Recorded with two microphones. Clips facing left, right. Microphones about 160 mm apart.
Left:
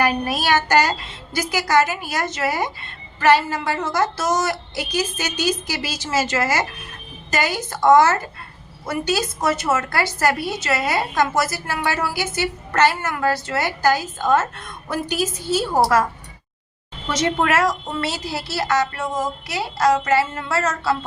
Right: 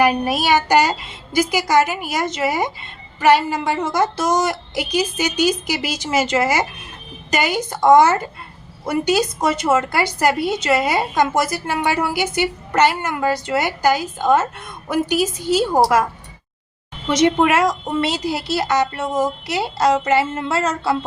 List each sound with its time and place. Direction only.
0.0 s a woman's voice: 15° right (ahead or behind)
17.1 s a woman's voice: 15° right (ahead or behind)